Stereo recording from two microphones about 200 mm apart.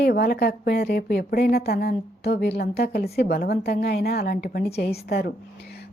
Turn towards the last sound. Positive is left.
turn(degrees=50)  # may be behind; listen again after turning